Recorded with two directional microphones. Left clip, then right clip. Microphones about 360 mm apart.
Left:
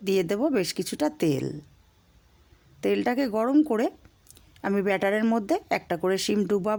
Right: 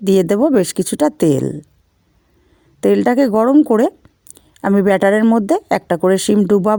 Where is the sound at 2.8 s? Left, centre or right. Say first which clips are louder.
Right 12 dB; centre.